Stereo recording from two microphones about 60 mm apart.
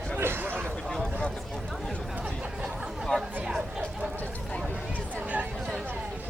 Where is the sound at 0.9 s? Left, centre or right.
Centre.